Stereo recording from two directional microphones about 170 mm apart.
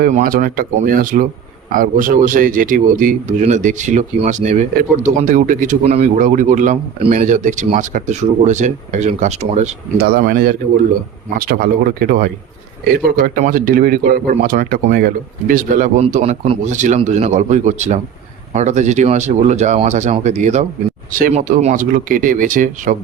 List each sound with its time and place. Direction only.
0.0 s a man's voice: 55° right (ahead or behind)
5.8 s a man's voice: 35° right (ahead or behind)
10.0 s a man's voice: 65° right (ahead or behind)